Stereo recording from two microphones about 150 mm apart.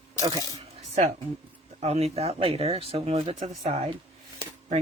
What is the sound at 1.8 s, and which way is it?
Speech, 45° right (ahead or behind).